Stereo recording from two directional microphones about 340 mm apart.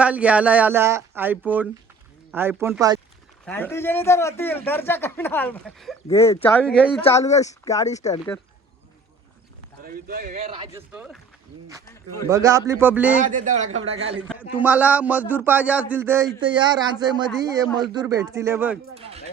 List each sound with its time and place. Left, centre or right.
0.0 s a man's voice: centre
3.4 s a man's voice: centre
7.0 s a man's voice: centre
9.8 s speech: right; by 11.2 s centre
12.3 s speech: centre
13.1 s speech: right
14.3 s a man's voice: centre